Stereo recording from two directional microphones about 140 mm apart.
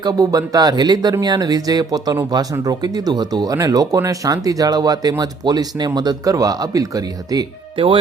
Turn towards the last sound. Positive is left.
turn(degrees=-35)  # may be behind; listen again after turning